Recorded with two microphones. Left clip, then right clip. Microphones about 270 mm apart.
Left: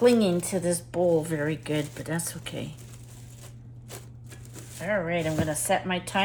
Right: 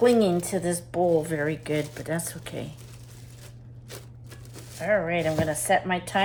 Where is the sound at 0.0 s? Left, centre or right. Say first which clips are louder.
Right 1 dB; centre.